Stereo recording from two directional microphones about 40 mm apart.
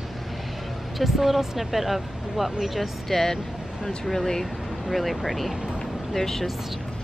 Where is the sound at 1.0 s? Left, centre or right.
Centre.